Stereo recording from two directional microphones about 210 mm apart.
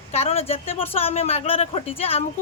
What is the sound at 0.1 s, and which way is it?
Speech, 30° left (ahead or behind).